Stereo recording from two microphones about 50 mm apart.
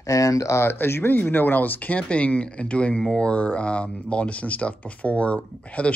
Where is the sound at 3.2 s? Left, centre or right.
Left.